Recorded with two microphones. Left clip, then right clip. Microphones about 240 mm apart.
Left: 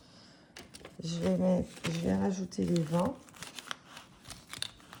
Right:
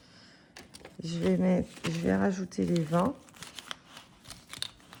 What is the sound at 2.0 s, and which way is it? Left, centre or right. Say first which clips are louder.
Speech: right 5 dB; right.